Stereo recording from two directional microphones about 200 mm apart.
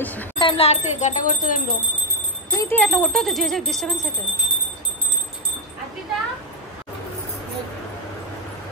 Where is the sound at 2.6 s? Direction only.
5° left (ahead or behind).